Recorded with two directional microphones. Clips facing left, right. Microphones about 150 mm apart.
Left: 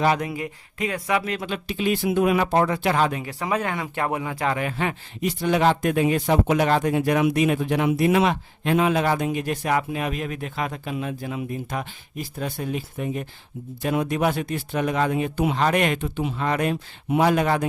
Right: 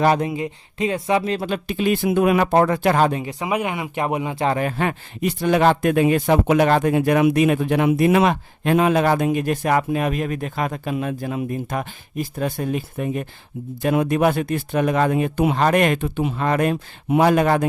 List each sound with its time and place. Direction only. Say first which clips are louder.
0.2 s speech: right 5 dB; 25° right (ahead or behind)
1.5 s speech: right 4 dB; 45° right (ahead or behind)
3.1 s speech: right 3 dB; 25° right (ahead or behind)
4.5 s speech: right 4 dB; 45° right (ahead or behind)